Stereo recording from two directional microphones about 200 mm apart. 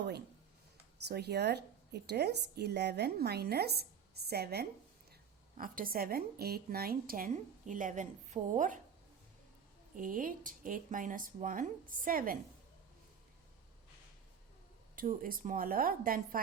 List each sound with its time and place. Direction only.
1.0 s speech: 55° right (ahead or behind); by 8.8 s 40° right (ahead or behind)
9.9 s speech: 45° right (ahead or behind)
14.9 s speech: 45° right (ahead or behind)